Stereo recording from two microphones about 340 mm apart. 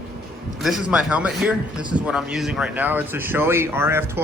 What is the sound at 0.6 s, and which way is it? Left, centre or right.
A man's voice, centre.